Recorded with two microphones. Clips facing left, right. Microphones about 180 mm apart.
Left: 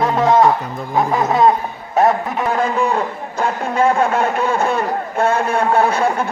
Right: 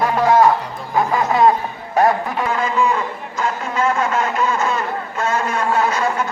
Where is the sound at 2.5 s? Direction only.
55° left (ahead or behind).